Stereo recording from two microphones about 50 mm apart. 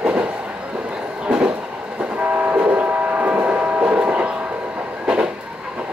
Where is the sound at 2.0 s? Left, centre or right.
Right.